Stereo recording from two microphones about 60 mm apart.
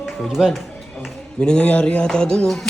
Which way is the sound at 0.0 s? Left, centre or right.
Centre.